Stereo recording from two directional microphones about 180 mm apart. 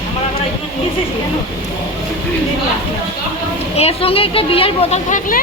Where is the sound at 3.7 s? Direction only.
35° left (ahead or behind).